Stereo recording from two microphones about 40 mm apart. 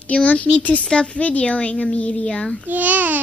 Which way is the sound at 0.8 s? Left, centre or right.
Left.